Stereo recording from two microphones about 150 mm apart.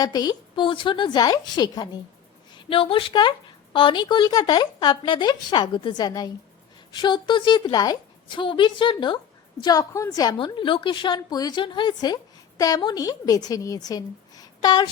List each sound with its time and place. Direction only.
0.0 s a woman's voice: 25° left (ahead or behind)